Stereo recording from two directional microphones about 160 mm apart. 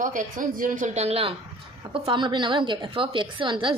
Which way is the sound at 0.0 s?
55° right (ahead or behind).